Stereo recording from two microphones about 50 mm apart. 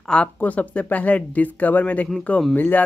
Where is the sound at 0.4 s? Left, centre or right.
Left.